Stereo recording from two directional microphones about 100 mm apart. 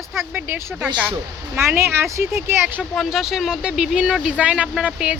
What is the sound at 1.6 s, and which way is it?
Speech, 25° right (ahead or behind).